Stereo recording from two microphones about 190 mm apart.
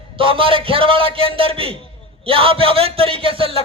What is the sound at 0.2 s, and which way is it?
A man's voice, 30° right (ahead or behind).